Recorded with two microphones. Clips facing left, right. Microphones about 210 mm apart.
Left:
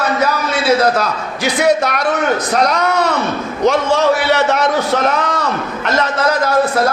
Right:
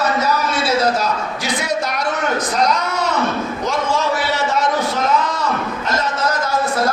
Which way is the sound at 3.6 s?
70° left (ahead or behind).